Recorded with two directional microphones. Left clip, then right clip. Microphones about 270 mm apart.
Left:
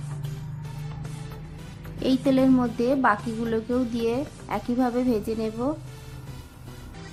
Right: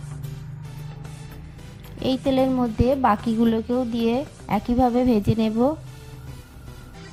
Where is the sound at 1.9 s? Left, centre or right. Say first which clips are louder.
Right 1 dB; right.